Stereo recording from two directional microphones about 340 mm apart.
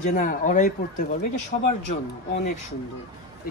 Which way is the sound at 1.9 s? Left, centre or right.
Centre.